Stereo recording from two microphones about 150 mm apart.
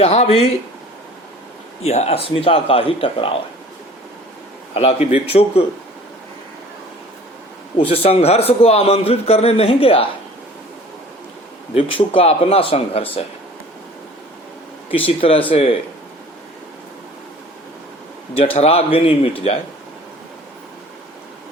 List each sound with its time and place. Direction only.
0.0 s speech: 45° left (ahead or behind)
1.8 s a man's voice: 45° left (ahead or behind)
4.7 s a man's voice: 40° left (ahead or behind)
7.8 s a man's voice: 40° left (ahead or behind)
11.7 s a man's voice: 35° left (ahead or behind)
14.8 s a man's voice: 35° left (ahead or behind)
18.3 s a man's voice: 40° left (ahead or behind)